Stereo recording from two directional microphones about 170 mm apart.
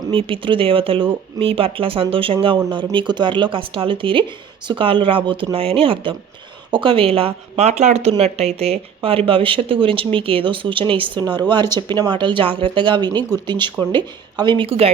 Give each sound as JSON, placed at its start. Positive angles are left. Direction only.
{"t": 0.1, "sound": "speech", "side_deg": -30}